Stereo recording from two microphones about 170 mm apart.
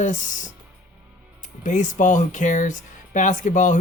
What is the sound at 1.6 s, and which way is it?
Speech, 45° left (ahead or behind).